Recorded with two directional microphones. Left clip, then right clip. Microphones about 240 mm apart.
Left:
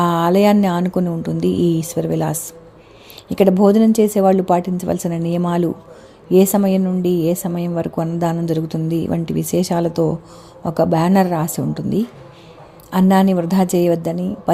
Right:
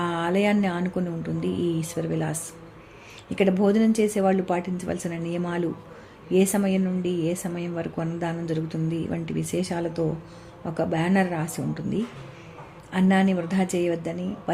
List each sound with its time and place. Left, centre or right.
0.0 s a woman's voice: left